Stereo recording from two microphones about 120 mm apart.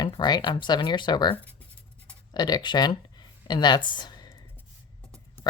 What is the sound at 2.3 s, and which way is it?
Speech, 35° left (ahead or behind).